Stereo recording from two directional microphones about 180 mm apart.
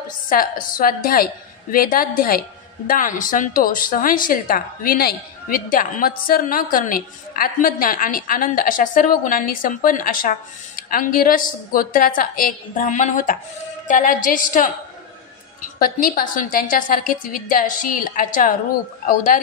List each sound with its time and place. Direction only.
0.3 s a woman's voice: 50° left (ahead or behind)
15.8 s a woman's voice: 55° left (ahead or behind)